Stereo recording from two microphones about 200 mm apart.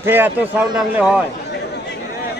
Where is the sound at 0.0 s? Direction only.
10° right (ahead or behind).